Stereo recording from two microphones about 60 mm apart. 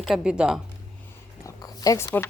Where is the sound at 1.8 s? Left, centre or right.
Left.